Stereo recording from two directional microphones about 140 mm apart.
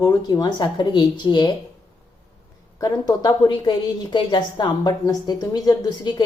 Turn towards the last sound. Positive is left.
turn(degrees=30)  # may be behind; listen again after turning